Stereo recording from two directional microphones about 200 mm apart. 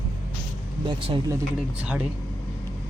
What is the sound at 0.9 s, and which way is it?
Speech, 25° right (ahead or behind).